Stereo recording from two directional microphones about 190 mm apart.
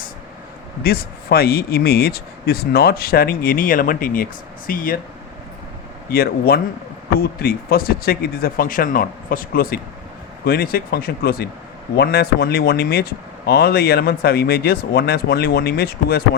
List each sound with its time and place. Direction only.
0.8 s speech: 55° left (ahead or behind)
6.1 s speech: 55° left (ahead or behind)